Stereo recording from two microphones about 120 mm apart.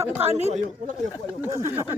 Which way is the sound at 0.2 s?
60° right (ahead or behind).